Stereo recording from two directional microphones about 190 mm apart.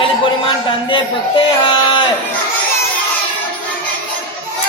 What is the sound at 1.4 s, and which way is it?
Speech, 25° left (ahead or behind).